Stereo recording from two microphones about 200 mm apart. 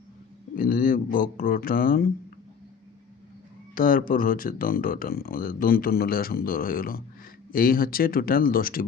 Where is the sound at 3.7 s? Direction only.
45° left (ahead or behind).